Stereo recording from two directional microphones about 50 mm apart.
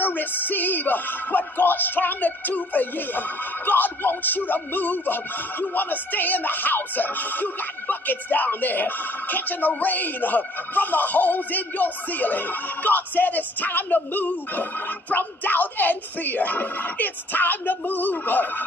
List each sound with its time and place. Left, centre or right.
0.0 s music: left